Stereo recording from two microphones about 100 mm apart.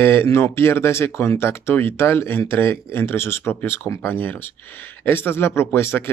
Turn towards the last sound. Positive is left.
turn(degrees=25)  # may be behind; listen again after turning